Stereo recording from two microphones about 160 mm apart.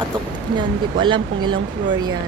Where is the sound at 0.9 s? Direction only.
30° right (ahead or behind).